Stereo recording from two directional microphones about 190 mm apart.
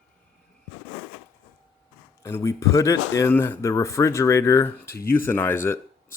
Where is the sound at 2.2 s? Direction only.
15° left (ahead or behind).